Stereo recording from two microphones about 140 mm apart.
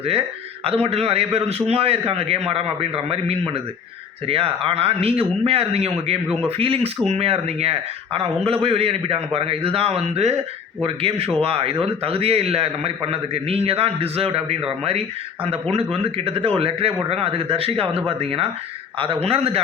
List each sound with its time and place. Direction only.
0.0 s a man's voice: 45° right (ahead or behind)